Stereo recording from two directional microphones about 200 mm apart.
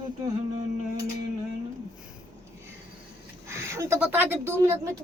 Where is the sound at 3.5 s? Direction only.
15° right (ahead or behind).